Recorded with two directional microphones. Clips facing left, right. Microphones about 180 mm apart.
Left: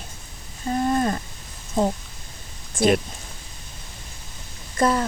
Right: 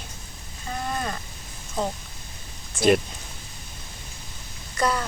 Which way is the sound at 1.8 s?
50° left (ahead or behind).